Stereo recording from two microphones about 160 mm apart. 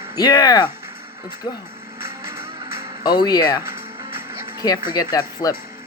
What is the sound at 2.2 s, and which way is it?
Music, 15° right (ahead or behind).